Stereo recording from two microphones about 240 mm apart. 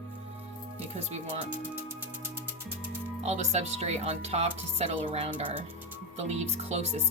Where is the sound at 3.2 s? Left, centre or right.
Right.